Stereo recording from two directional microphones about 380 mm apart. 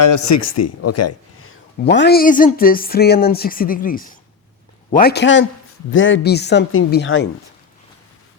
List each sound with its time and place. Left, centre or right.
0.0 s speech: left